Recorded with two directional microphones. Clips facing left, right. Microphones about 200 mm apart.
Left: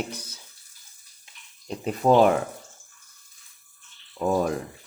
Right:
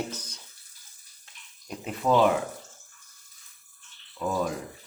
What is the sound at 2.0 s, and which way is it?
Speech, 50° left (ahead or behind).